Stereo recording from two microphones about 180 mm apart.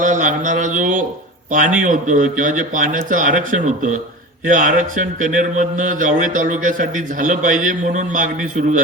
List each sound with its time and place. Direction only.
0.0 s a man's voice: 45° right (ahead or behind)